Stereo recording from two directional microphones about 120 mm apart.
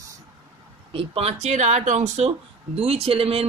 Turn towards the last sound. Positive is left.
turn(degrees=-50)  # may be behind; listen again after turning